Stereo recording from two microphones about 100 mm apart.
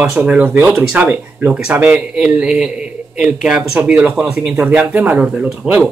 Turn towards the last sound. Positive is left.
turn(degrees=-10)  # may be behind; listen again after turning